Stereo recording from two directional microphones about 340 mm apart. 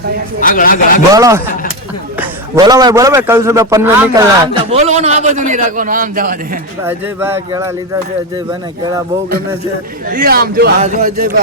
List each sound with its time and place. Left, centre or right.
0.5 s a man's voice: left
1.1 s a man's voice: centre
2.6 s a man's voice: centre
4.7 s a man's voice: centre
6.8 s a man's voice: centre
10.1 s a man's voice: right